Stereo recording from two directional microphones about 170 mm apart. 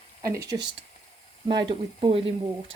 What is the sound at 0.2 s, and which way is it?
Speech, 20° right (ahead or behind).